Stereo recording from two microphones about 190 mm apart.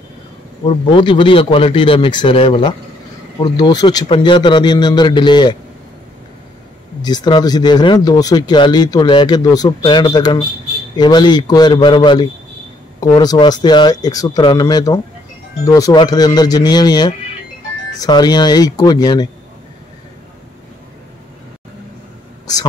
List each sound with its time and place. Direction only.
0.7 s speech: 25° left (ahead or behind)
7.0 s speech: 20° left (ahead or behind)